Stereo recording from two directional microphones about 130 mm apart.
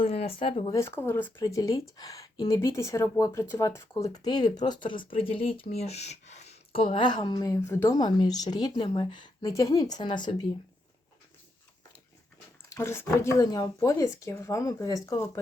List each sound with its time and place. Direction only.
0.1 s speech: 50° left (ahead or behind)
0.7 s speech: 20° left (ahead or behind)
1.5 s speech: 25° left (ahead or behind)
9.5 s speech: 25° left (ahead or behind)
12.6 s speech: 20° left (ahead or behind)